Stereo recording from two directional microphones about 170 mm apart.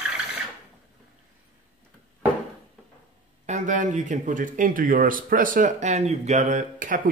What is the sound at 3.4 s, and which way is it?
Speech, 45° right (ahead or behind).